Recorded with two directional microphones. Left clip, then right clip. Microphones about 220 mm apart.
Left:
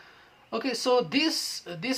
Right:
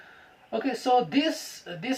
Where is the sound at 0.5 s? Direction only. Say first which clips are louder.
Right 1 dB; 25° left (ahead or behind).